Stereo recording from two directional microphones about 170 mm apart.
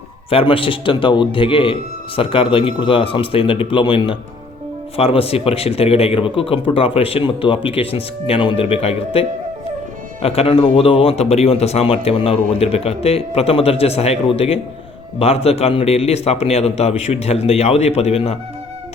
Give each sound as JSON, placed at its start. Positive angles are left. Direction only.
{"t": 0.3, "sound": "speech", "side_deg": 30}